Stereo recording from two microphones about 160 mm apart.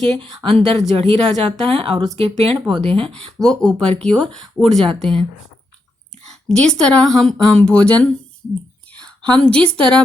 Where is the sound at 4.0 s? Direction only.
5° left (ahead or behind).